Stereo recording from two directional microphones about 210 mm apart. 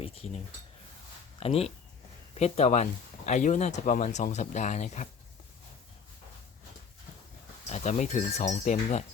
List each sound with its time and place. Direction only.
1.4 s speech: 30° left (ahead or behind)
7.7 s speech: 35° left (ahead or behind)